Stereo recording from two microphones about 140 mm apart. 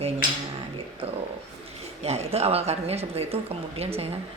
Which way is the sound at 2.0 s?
45° right (ahead or behind).